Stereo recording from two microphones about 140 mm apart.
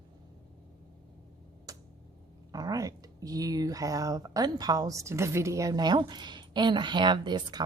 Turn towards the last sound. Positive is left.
turn(degrees=-30)  # may be behind; listen again after turning